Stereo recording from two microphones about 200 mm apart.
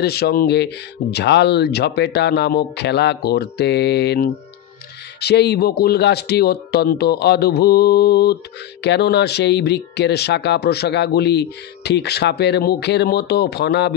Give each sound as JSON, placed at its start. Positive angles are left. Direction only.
{"t": 0.0, "sound": "speech", "side_deg": 55}